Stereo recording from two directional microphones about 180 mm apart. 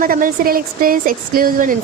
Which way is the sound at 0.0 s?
50° right (ahead or behind).